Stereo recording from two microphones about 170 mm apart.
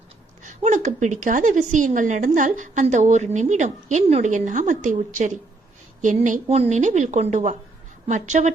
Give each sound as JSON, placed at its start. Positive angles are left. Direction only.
{"t": 0.4, "sound": "a woman's voice", "side_deg": -45}